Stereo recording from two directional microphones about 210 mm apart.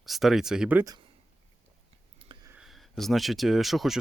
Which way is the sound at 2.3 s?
20° right (ahead or behind).